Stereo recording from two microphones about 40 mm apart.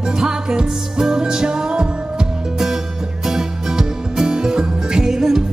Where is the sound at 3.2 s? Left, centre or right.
Centre.